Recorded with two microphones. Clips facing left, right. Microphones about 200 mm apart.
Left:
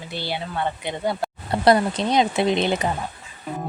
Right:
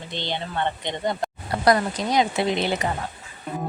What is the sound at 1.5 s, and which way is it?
Speech, 25° left (ahead or behind).